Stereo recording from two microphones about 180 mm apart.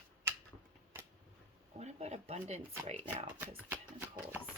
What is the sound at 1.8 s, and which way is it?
A woman's voice, 40° right (ahead or behind).